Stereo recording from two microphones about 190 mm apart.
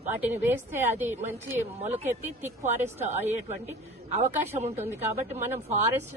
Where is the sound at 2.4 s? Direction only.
35° right (ahead or behind).